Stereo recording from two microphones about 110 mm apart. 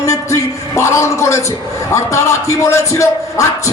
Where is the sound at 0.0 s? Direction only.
30° left (ahead or behind).